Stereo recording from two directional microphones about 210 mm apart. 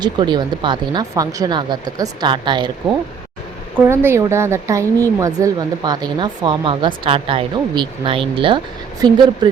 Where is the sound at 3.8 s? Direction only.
10° right (ahead or behind).